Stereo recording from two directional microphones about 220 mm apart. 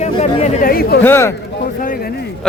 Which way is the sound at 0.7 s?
45° left (ahead or behind).